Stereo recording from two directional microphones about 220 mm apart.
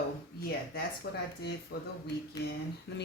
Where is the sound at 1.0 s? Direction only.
50° left (ahead or behind).